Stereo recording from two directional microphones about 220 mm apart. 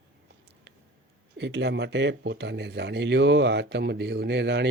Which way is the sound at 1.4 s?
55° right (ahead or behind).